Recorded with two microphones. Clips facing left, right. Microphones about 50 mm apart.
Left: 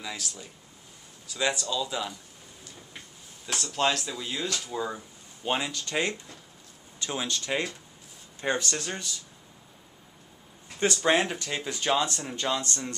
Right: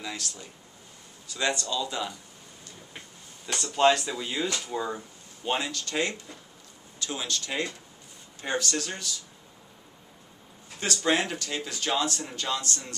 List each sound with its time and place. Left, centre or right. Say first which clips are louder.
0.0 s speech: right 1 dB; centre
3.4 s speech: right 5 dB; centre
5.6 s speech: even; centre
10.8 s speech: left 2 dB; left